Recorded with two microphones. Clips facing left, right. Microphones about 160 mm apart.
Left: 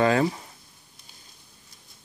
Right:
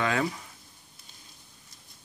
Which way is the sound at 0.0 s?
35° left (ahead or behind).